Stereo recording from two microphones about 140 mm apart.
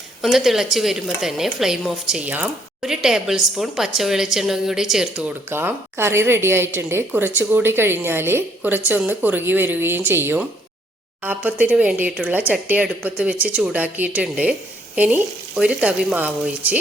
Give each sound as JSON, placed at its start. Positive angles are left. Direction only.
{"t": 0.2, "sound": "a woman's voice", "side_deg": 0}
{"t": 5.5, "sound": "a woman's voice", "side_deg": -15}
{"t": 11.4, "sound": "a woman's voice", "side_deg": -10}